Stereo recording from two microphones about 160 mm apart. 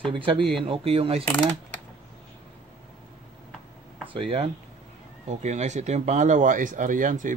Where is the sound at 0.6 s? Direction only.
35° right (ahead or behind).